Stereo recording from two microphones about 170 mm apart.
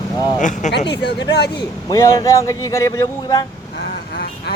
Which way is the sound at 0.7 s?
85° left.